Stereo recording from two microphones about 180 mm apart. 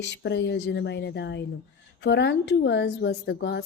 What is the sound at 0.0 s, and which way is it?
A woman's voice, 75° left (ahead or behind).